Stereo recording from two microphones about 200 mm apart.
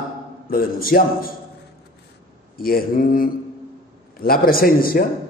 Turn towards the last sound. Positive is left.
turn(degrees=45)  # may be behind; listen again after turning